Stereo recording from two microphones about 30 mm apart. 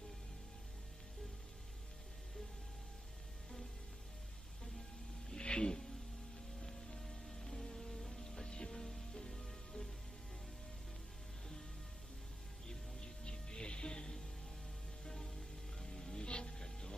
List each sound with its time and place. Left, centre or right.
5.4 s music: left
7.0 s music: centre
8.2 s rain on surface: left
8.7 s music: centre
13.2 s music: left
15.0 s music: centre
16.3 s a sound: left